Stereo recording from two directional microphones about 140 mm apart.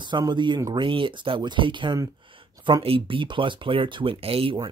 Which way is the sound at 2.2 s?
40° right (ahead or behind).